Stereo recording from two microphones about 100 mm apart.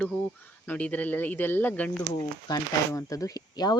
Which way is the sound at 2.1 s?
35° left (ahead or behind).